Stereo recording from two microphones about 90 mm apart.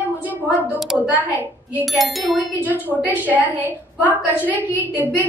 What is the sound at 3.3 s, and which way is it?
Speech, 20° right (ahead or behind).